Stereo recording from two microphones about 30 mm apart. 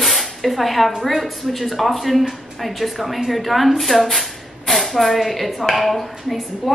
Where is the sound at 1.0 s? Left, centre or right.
Centre.